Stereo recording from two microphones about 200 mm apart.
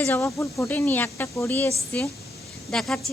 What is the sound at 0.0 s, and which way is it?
Speech, 10° left (ahead or behind).